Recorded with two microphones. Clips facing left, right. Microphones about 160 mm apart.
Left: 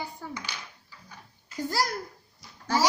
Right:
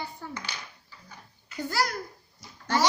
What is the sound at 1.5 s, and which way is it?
Speech, 35° left (ahead or behind).